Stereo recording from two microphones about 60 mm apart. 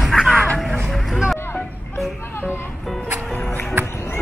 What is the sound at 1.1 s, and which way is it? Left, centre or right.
Music, centre.